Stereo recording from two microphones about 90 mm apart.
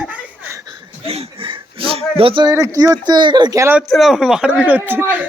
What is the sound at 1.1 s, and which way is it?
Speech, 80° right.